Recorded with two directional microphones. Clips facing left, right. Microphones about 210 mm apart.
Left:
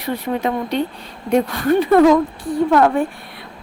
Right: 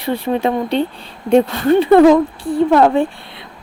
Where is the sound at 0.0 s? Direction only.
30° right (ahead or behind).